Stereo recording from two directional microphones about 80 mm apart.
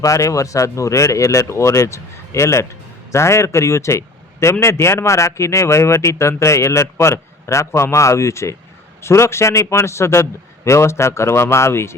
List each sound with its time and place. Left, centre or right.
0.0 s a man's voice: left